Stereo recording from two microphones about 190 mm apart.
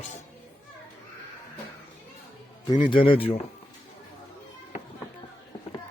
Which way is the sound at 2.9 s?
25° left (ahead or behind).